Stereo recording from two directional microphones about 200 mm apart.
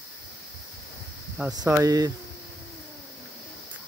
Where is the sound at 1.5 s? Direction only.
15° right (ahead or behind).